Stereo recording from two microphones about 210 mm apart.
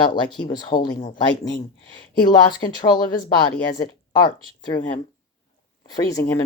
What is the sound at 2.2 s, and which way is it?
Speech, 20° left (ahead or behind).